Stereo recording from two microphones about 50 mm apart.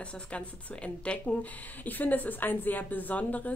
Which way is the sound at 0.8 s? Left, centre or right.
Left.